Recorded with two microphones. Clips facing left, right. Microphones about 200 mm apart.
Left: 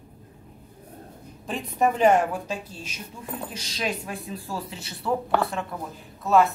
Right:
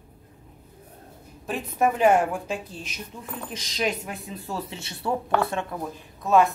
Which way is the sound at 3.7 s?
20° right (ahead or behind).